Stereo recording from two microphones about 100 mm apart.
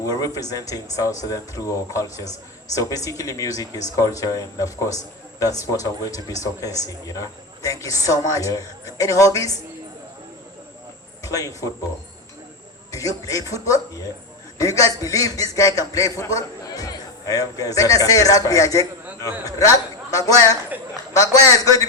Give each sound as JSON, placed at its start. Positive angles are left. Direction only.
{"t": 0.0, "sound": "a man's voice", "side_deg": 35}
{"t": 11.2, "sound": "speech", "side_deg": 35}
{"t": 12.9, "sound": "a man's voice", "side_deg": 35}